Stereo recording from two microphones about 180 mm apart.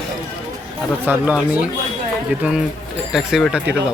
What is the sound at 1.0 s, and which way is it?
Speech, 10° right (ahead or behind).